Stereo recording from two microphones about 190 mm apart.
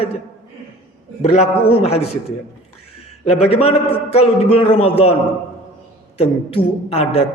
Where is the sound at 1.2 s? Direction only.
35° left (ahead or behind).